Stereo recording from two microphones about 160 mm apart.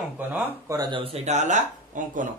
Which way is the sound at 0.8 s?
30° right (ahead or behind).